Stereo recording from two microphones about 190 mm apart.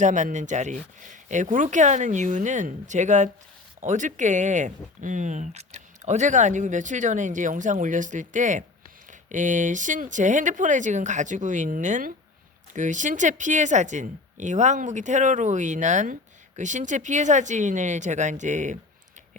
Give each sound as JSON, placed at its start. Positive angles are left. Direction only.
{"t": 0.0, "sound": "speech", "side_deg": -40}